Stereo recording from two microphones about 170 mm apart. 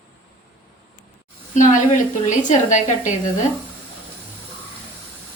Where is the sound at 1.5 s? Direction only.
50° left (ahead or behind).